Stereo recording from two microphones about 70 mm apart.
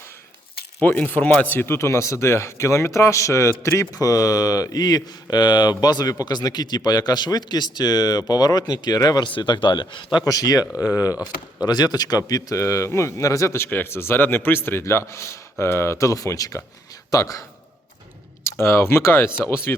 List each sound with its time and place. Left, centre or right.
0.8 s speech: left
11.6 s a man's voice: left
18.4 s a man's voice: left